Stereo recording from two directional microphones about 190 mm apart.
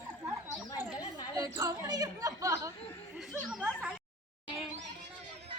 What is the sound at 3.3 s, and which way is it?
Speech, centre (ahead or behind).